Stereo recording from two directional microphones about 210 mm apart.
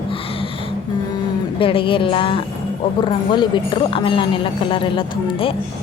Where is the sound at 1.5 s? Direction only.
25° left (ahead or behind).